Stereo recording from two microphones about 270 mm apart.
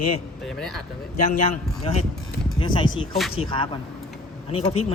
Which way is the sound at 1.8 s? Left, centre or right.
Left.